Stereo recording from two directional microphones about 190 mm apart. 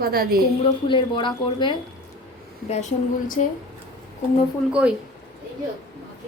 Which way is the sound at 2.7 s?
40° left (ahead or behind).